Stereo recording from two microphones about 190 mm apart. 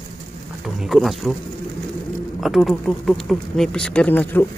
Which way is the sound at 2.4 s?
Centre (ahead or behind).